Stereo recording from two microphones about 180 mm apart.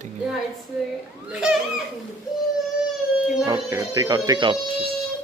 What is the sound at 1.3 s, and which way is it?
Speech, 5° right (ahead or behind).